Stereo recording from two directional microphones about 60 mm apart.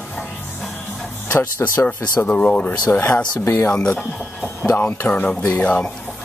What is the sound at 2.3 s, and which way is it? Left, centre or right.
Speech, left.